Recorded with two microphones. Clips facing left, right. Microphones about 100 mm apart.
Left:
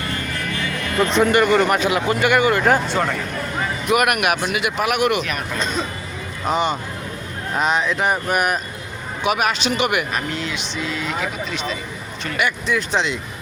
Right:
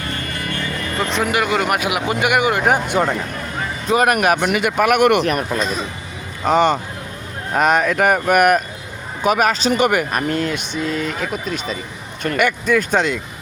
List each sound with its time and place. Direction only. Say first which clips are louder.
0.5 s speech: left 2 dB; centre (ahead or behind); by 3.2 s 15° right (ahead or behind)
3.8 s speech: right 3 dB; 35° right (ahead or behind)
4.4 s speech: right 5 dB; 50° right (ahead or behind)
6.4 s speech: right 5 dB; 50° right (ahead or behind)
9.2 s speech: right 4 dB; 40° right (ahead or behind)